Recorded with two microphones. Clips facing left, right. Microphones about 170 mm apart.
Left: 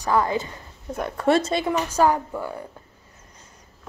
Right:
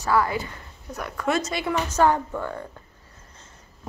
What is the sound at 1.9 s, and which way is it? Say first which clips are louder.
Speech: right 2 dB; 10° left (ahead or behind).